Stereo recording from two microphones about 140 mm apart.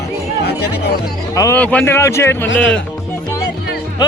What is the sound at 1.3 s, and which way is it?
Speech, 25° left (ahead or behind).